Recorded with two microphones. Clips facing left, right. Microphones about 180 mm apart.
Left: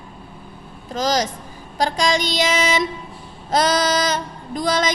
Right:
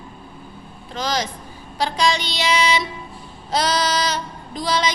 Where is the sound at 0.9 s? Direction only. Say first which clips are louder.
Left 4 dB; 45° left (ahead or behind).